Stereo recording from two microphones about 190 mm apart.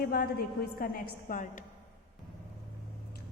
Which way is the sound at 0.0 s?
55° left (ahead or behind).